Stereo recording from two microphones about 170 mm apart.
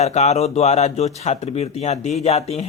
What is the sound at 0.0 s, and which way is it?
Speech, 40° left (ahead or behind).